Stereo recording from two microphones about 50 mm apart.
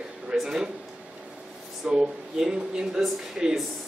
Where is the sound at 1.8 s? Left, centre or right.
Centre.